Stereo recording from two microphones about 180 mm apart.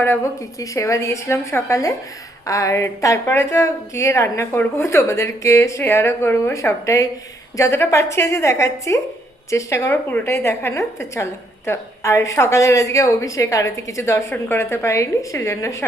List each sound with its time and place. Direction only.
0.0 s a woman's voice: 15° left (ahead or behind)